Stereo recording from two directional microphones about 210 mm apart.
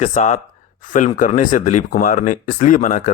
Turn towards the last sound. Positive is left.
turn(degrees=35)  # may be behind; listen again after turning